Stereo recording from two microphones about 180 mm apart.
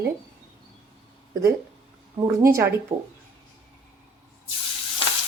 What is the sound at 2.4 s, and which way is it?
Speech, 15° right (ahead or behind).